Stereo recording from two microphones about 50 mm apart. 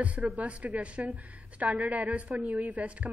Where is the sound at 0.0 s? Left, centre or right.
Right.